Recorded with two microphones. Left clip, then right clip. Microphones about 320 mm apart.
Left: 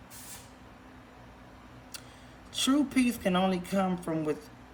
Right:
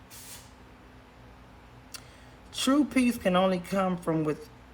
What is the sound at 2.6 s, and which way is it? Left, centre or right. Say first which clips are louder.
Speech: right 2 dB; right.